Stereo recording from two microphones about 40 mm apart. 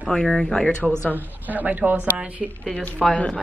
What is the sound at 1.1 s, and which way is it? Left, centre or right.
A woman's voice, right.